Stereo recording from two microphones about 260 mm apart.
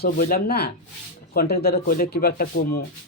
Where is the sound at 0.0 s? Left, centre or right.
Left.